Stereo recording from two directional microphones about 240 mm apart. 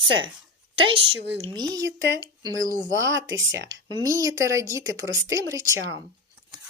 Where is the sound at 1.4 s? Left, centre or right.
Centre.